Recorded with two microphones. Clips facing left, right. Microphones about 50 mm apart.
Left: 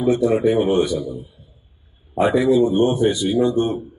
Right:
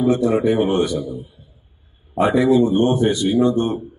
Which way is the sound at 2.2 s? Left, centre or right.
Centre.